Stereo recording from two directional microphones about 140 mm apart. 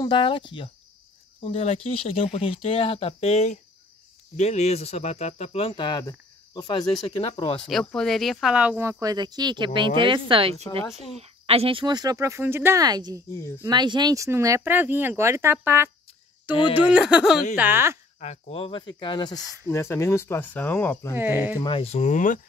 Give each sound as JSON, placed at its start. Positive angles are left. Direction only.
{"t": 0.0, "sound": "speech", "side_deg": 35}
{"t": 7.9, "sound": "speech", "side_deg": 5}
{"t": 12.8, "sound": "speech", "side_deg": -30}
{"t": 17.6, "sound": "speech", "side_deg": -15}
{"t": 18.2, "sound": "speech", "side_deg": 50}
{"t": 19.7, "sound": "speech", "side_deg": 20}
{"t": 21.1, "sound": "speech", "side_deg": -15}
{"t": 21.5, "sound": "speech", "side_deg": 40}